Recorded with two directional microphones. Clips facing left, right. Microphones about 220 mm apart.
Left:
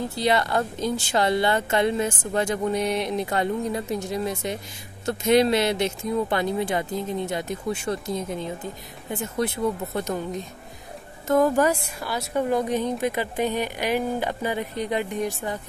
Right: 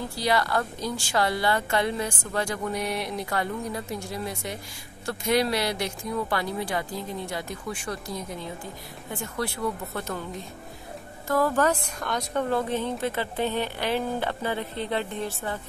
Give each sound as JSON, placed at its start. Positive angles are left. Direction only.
{"t": 0.1, "sound": "a woman's voice", "side_deg": 20}